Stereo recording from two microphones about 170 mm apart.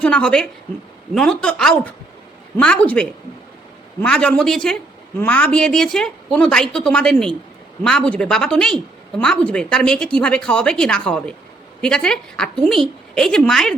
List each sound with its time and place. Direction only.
0.0 s a woman's voice: 5° left (ahead or behind)
4.0 s speech: 5° left (ahead or behind)